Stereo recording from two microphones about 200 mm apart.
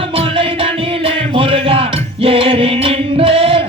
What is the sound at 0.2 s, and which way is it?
Music, 25° right (ahead or behind).